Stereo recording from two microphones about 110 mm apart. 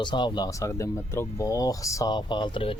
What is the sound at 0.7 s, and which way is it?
Speech, 25° left (ahead or behind).